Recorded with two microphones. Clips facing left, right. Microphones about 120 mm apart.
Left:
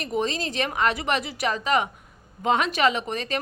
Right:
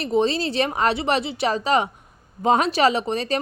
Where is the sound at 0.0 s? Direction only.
30° right (ahead or behind).